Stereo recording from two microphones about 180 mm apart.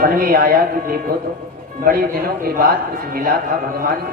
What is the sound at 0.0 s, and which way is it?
A woman's voice, 55° right (ahead or behind).